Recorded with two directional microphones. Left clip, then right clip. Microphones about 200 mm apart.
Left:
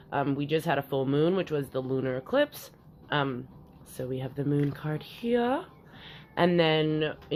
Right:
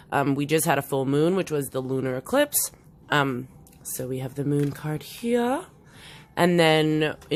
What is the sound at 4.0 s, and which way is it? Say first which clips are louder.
Speech: right 3 dB; 25° right (ahead or behind).